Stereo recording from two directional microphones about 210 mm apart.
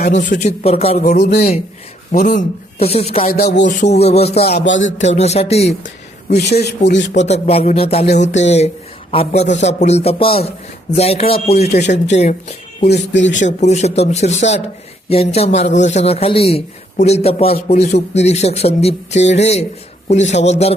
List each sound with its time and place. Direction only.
0.3 s a man's voice: 30° left (ahead or behind)
1.3 s a man's voice: 50° left (ahead or behind); by 3.2 s 30° left (ahead or behind)
3.2 s speech: 45° left (ahead or behind)
3.7 s speech: 35° left (ahead or behind)
4.4 s a sound: 50° left (ahead or behind)
4.9 s speech: 30° left (ahead or behind)
6.4 s speech: 50° left (ahead or behind)
7.1 s a man's voice: 30° left (ahead or behind)
8.0 s speech: 55° left (ahead or behind)
8.3 s a man's voice: 30° left (ahead or behind)
12.9 s a sound: 60° left (ahead or behind)
13.4 s a man's voice: 35° left (ahead or behind)